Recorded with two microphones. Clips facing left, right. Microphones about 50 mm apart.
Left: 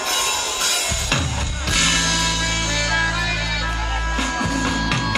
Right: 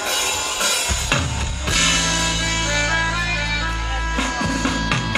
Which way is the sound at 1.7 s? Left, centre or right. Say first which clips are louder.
Even; centre.